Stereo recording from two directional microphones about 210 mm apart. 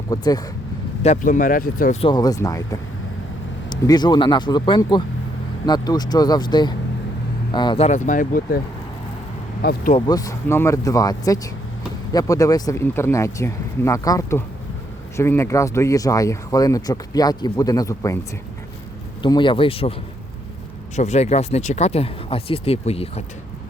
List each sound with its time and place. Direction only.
0.1 s speech: 20° left (ahead or behind)
1.0 s speech: 35° left (ahead or behind)
2.0 s speech: 20° left (ahead or behind)
3.7 s speech: 20° left (ahead or behind); by 9.9 s 45° left (ahead or behind)
10.1 s speech: 15° left (ahead or behind)
19.2 s speech: 20° left (ahead or behind)
20.9 s speech: 35° left (ahead or behind)